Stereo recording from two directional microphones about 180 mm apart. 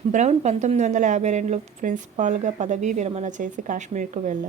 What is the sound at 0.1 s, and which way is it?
A woman's voice, 40° right (ahead or behind).